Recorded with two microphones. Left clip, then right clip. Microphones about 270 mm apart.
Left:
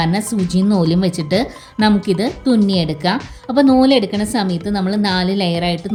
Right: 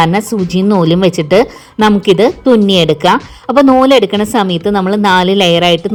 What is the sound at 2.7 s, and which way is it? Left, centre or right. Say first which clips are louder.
A woman's voice: right 10 dB; centre.